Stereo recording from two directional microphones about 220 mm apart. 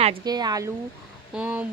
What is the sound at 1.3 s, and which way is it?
Speech, 5° right (ahead or behind).